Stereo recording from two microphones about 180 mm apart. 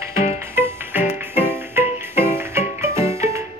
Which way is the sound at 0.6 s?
10° right (ahead or behind).